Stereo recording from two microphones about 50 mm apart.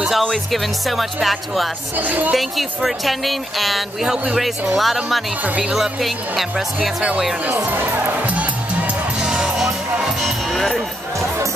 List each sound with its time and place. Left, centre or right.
0.2 s speech: centre
0.8 s speech: centre
2.0 s speech: right
2.3 s speech: centre
7.5 s speech: right
9.2 s music: centre
10.0 s music: centre